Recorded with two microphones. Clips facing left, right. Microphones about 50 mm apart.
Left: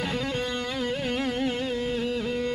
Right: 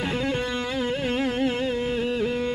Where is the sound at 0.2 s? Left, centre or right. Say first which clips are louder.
Right 3 dB; centre.